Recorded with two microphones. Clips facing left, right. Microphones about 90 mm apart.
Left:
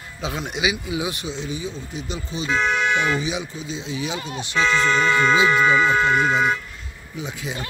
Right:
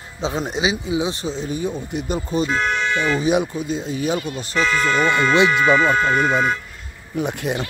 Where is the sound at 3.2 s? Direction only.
55° right (ahead or behind).